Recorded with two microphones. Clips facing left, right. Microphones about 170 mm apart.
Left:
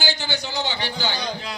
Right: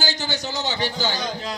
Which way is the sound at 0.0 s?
40° right (ahead or behind).